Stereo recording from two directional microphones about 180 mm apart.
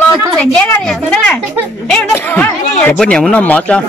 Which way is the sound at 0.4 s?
5° left (ahead or behind).